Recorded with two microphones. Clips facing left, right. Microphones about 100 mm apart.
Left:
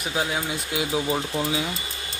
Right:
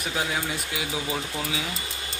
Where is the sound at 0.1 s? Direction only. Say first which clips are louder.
Left 2 dB; 15° left (ahead or behind).